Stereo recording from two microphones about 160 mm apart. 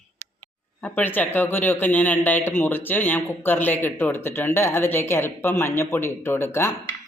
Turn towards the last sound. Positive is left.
turn(degrees=15)  # may be behind; listen again after turning